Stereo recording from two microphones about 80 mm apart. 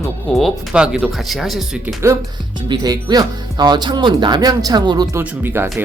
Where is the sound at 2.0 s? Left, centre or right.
Right.